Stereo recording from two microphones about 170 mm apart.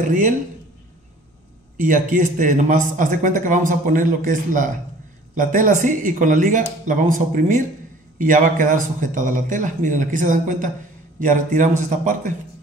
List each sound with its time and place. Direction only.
0.0 s a man's voice: 50° right (ahead or behind)
1.8 s a man's voice: 50° right (ahead or behind)